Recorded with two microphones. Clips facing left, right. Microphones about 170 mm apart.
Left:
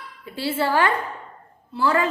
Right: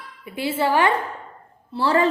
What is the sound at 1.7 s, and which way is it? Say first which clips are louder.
Speech: right 2 dB; 30° right (ahead or behind).